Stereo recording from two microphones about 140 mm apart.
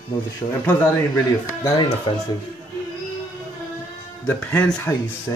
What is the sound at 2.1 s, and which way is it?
Speech, 40° left (ahead or behind).